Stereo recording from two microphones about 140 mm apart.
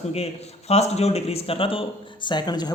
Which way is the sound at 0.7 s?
50° left (ahead or behind).